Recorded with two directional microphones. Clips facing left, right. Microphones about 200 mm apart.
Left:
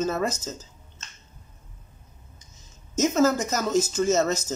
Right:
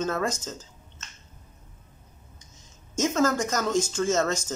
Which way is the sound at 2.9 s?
5° left (ahead or behind).